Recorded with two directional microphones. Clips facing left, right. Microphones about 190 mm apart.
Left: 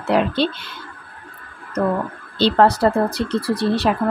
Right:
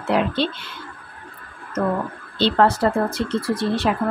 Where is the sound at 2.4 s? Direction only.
35° left (ahead or behind).